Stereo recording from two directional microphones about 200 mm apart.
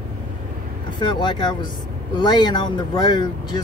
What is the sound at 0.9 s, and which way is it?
Speech, 20° left (ahead or behind).